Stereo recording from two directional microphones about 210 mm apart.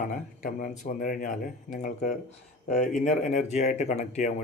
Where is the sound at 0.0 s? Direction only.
40° left (ahead or behind).